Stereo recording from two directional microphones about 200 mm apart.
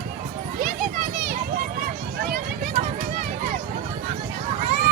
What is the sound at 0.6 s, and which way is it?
Children playing, 45° right (ahead or behind).